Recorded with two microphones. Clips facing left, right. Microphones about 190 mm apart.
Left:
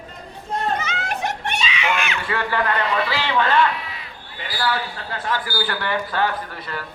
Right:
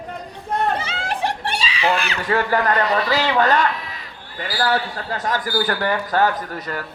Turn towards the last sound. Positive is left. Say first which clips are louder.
# right 3 dB
turn(degrees=-45)  # may be behind; listen again after turning